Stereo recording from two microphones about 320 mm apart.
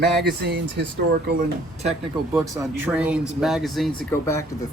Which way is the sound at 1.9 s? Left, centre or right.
Centre.